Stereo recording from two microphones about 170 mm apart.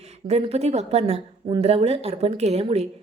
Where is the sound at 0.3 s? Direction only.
40° right (ahead or behind).